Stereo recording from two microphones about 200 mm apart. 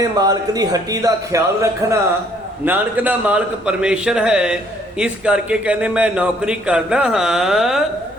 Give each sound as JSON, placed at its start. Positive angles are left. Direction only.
{"t": 0.2, "sound": "speech", "side_deg": -20}